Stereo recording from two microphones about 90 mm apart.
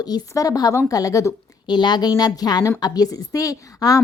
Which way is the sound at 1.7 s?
55° left (ahead or behind).